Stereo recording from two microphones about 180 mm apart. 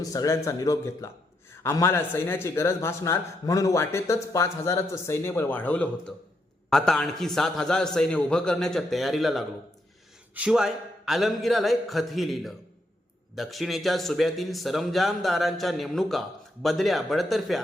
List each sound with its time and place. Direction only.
0.0 s speech: 20° left (ahead or behind); by 17.6 s centre (ahead or behind)